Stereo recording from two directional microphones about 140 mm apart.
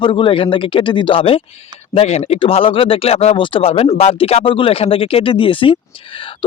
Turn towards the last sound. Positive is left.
turn(degrees=40)  # may be behind; listen again after turning